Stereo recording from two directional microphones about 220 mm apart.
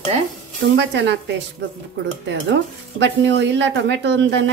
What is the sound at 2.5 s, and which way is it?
Speech, 55° right (ahead or behind).